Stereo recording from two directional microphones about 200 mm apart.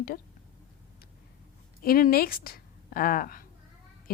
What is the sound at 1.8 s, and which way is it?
A woman's voice, 45° left (ahead or behind).